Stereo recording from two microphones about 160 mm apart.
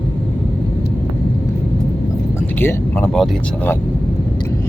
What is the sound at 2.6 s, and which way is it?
Speech, 15° left (ahead or behind).